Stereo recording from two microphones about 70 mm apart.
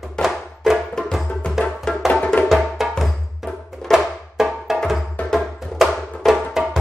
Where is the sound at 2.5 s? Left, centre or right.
Centre.